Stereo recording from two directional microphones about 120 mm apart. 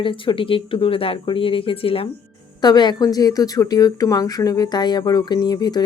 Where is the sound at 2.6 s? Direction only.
35° left (ahead or behind).